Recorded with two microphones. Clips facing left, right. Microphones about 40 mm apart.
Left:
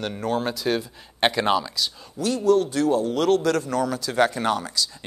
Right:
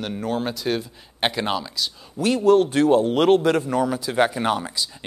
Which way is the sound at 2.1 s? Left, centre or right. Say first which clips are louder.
Right 3 dB; right.